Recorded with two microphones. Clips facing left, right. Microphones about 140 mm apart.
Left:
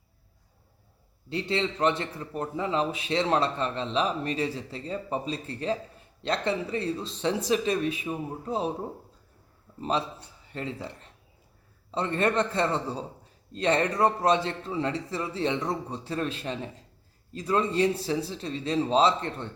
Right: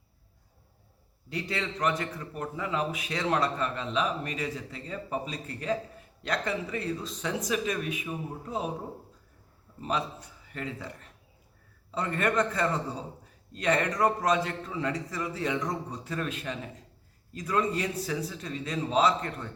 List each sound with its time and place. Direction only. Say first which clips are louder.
1.3 s a man's voice: left 5 dB; 25° left (ahead or behind)
9.8 s speech: left 3 dB; 30° left (ahead or behind)
11.9 s a man's voice: left 3 dB; 30° left (ahead or behind)